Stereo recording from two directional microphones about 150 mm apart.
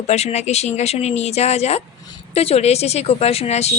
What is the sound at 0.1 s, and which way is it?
Speech, 45° left (ahead or behind).